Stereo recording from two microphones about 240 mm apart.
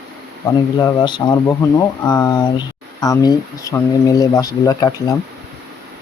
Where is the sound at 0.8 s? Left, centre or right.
Centre.